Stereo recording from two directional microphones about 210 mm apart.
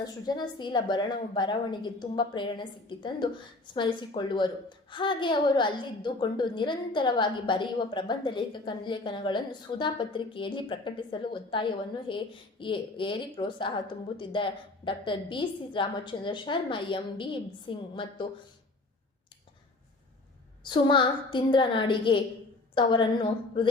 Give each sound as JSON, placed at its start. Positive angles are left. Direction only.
{"t": 0.0, "sound": "a woman's voice", "side_deg": 20}
{"t": 20.7, "sound": "a woman's voice", "side_deg": 20}